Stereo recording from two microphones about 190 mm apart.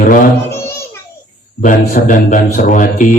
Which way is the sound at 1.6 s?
45° left (ahead or behind).